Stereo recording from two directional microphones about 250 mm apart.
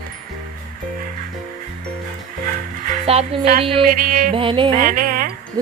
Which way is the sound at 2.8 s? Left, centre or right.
Right.